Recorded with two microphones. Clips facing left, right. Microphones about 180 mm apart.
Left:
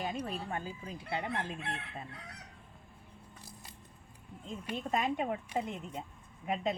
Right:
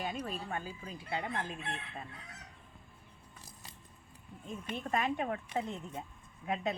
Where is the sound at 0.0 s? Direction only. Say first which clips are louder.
Left 1 dB; 35° left (ahead or behind).